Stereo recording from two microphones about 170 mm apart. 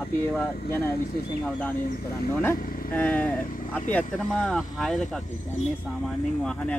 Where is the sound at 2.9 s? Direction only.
10° left (ahead or behind).